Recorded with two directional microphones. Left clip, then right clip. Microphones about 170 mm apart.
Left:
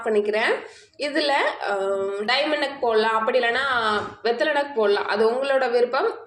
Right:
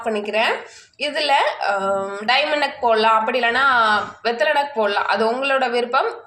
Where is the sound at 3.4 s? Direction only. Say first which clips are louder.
Right 5 dB; 30° left (ahead or behind).